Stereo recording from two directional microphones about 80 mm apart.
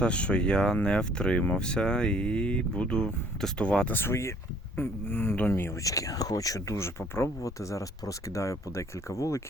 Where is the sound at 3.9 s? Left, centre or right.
Left.